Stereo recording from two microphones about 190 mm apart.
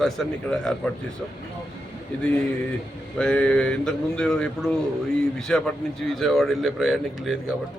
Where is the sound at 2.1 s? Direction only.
10° left (ahead or behind).